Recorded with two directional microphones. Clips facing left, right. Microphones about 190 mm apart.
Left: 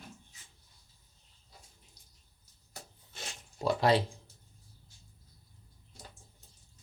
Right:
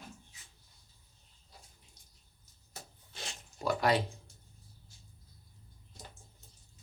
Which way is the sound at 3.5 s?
25° left (ahead or behind).